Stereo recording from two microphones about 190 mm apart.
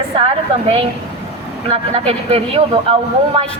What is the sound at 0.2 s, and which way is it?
A woman's voice, 30° right (ahead or behind).